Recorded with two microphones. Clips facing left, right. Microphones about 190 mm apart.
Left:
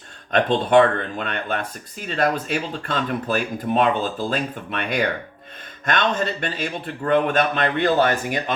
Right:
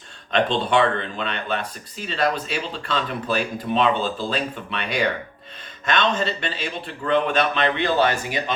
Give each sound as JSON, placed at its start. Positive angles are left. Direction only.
{"t": 0.3, "sound": "speech", "side_deg": 50}